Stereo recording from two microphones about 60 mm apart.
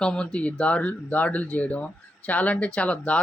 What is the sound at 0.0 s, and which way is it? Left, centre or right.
Speech, centre.